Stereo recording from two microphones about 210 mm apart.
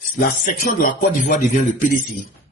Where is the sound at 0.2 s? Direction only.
40° left (ahead or behind).